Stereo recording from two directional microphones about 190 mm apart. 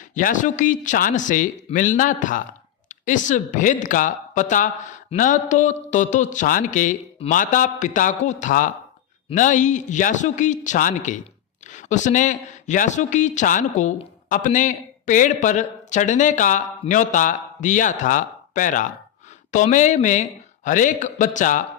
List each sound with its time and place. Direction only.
0.1 s speech: 45° left (ahead or behind)